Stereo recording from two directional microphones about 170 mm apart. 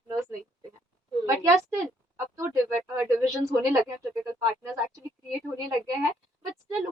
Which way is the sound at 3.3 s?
20° right (ahead or behind).